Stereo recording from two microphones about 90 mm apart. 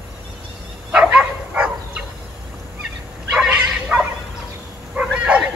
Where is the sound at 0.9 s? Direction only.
10° right (ahead or behind).